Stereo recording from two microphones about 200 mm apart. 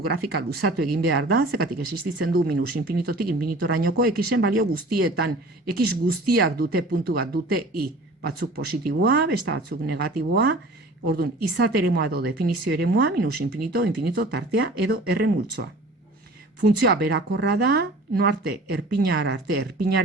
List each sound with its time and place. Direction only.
0.3 s speech: 50° right (ahead or behind)